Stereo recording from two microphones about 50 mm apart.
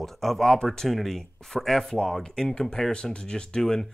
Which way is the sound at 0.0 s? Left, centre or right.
Centre.